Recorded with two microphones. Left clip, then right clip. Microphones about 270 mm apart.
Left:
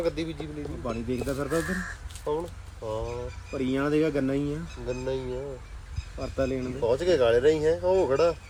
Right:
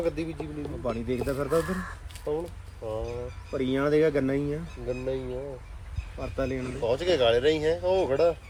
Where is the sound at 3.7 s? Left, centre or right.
Centre.